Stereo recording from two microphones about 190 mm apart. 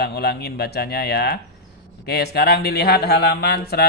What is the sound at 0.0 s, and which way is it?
Speech, 60° left (ahead or behind).